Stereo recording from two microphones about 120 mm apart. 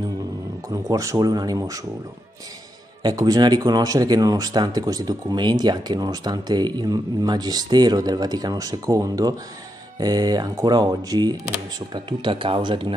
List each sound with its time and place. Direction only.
0.7 s speech: 25° right (ahead or behind)
3.0 s speech: 35° right (ahead or behind)